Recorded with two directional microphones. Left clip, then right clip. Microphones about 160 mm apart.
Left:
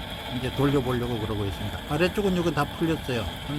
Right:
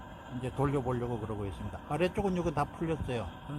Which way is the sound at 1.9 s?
25° right (ahead or behind).